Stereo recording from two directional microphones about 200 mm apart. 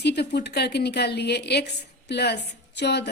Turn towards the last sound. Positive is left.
turn(degrees=55)  # may be behind; listen again after turning